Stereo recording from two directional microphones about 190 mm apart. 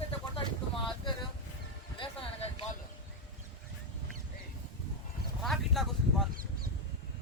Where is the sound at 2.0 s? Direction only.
30° left (ahead or behind).